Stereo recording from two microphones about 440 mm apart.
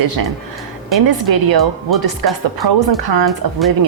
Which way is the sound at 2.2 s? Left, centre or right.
Right.